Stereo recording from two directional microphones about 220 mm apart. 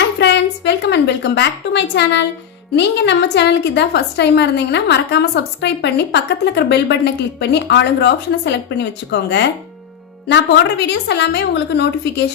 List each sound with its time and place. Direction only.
0.2 s a woman's voice: 50° left (ahead or behind)